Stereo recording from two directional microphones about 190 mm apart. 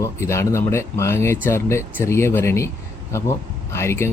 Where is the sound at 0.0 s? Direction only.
15° left (ahead or behind).